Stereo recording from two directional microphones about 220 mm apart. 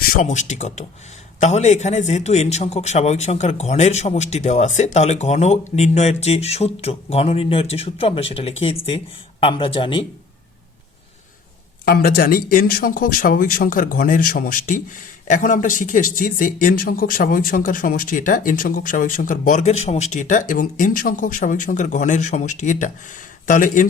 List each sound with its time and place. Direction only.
0.0 s a man's voice: 40° left (ahead or behind)
11.9 s speech: 45° left (ahead or behind)